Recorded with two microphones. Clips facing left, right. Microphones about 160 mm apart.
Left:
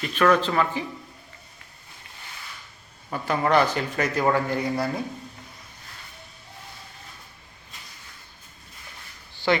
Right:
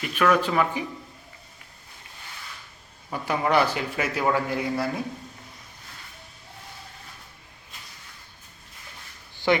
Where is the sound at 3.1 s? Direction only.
10° right (ahead or behind).